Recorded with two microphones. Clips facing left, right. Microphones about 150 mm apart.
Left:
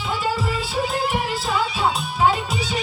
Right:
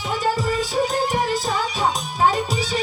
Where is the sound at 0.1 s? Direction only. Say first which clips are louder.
Right 2 dB; 40° right (ahead or behind).